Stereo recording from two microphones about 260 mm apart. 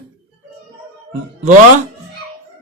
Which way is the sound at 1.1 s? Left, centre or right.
Right.